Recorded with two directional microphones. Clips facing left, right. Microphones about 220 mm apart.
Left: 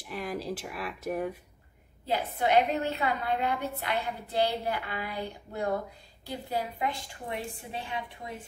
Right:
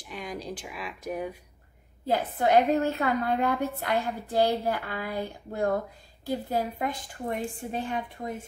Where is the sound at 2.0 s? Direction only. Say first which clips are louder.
Right 3 dB; 45° right (ahead or behind).